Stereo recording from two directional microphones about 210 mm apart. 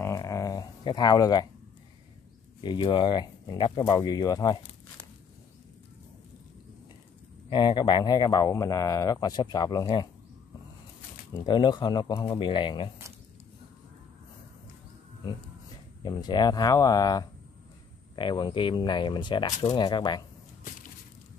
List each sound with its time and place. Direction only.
0.0 s a sound: 15° left (ahead or behind)
2.6 s speech: 20° left (ahead or behind)
7.4 s speech: 20° left (ahead or behind)
11.4 s speech: 20° left (ahead or behind)
16.0 s speech: 20° left (ahead or behind)